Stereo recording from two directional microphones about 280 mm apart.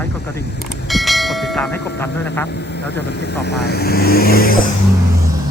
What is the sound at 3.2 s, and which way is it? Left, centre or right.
Speech, left.